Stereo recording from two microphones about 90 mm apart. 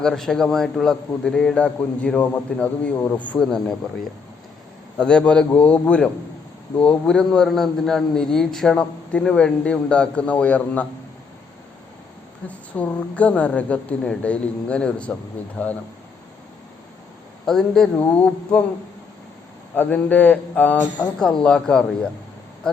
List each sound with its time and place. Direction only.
0.0 s a man's voice: 5° left (ahead or behind)
3.3 s a man's voice: 5° left (ahead or behind)
12.5 s a man's voice: 15° left (ahead or behind)
17.4 s speech: 5° left (ahead or behind)
19.7 s a man's voice: 20° left (ahead or behind)
21.2 s a man's voice: 10° left (ahead or behind)